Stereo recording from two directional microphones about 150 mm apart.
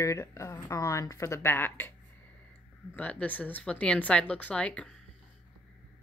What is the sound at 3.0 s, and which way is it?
A woman's voice, 10° left (ahead or behind).